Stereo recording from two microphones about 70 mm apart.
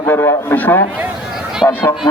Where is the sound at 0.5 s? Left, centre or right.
Left.